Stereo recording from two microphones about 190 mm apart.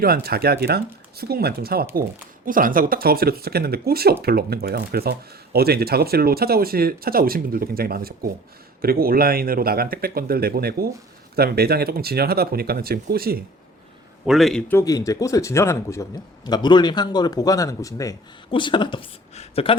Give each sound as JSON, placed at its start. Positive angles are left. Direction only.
{"t": 0.0, "sound": "speech", "side_deg": -55}
{"t": 14.3, "sound": "speech", "side_deg": 0}